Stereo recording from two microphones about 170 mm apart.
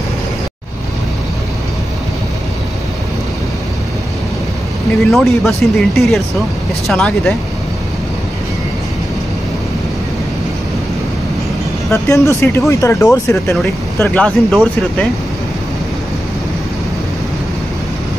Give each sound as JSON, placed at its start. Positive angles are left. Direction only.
{"t": 5.1, "sound": "speech", "side_deg": 0}
{"t": 11.9, "sound": "speech", "side_deg": 15}